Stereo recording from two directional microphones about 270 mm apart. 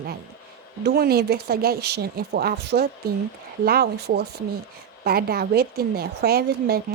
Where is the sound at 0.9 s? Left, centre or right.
Right.